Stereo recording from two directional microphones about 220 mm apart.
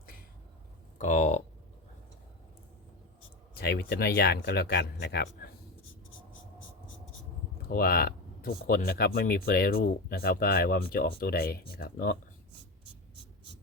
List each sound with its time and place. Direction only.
0.9 s speech: 35° left (ahead or behind)
3.6 s speech: 45° left (ahead or behind)
7.7 s speech: 45° left (ahead or behind)